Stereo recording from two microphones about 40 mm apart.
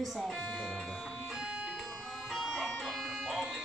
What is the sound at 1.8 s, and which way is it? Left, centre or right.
Music, centre.